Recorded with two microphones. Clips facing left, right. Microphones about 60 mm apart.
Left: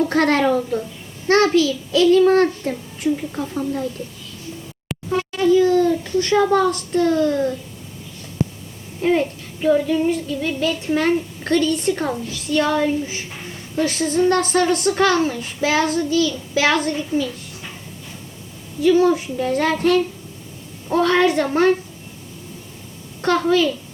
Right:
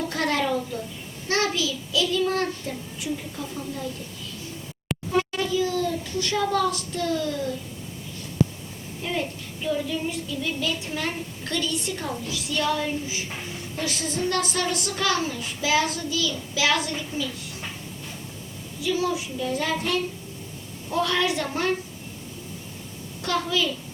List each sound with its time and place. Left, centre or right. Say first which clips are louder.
0.1 s child singing: left 8 dB; left
4.9 s a sound: even; centre
5.5 s a sound: left 10 dB; left
6.4 s a woman's voice: left 7 dB; left
9.0 s a child's voice: left 11 dB; left
9.6 s child singing: left 10 dB; left
13.7 s a woman's voice: left 10 dB; left
18.8 s child singing: left 11 dB; left
23.2 s child singing: left 8 dB; left